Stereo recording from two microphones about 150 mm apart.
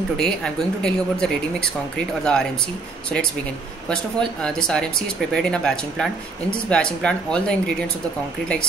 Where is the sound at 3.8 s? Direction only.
5° left (ahead or behind).